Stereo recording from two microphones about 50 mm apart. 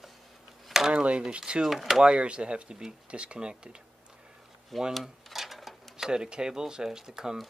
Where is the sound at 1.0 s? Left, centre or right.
Right.